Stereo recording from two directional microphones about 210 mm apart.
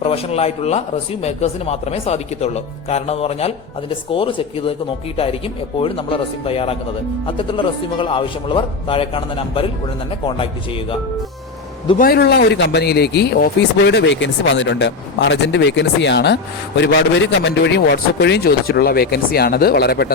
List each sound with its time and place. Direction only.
0.0 s speech: 30° left (ahead or behind)
12.0 s speech: 50° left (ahead or behind)